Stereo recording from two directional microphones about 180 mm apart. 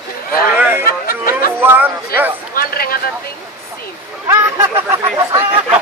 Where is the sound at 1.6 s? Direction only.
10° right (ahead or behind).